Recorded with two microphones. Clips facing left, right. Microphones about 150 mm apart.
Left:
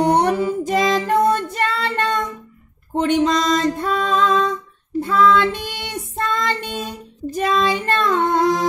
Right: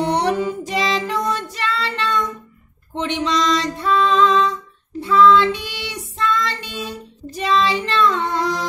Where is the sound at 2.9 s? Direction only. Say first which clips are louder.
Left 4 dB; 45° left (ahead or behind).